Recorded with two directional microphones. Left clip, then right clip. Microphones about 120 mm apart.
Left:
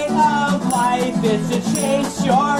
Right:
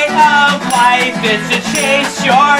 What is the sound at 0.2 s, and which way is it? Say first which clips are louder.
Music: right 8 dB; 30° right (ahead or behind).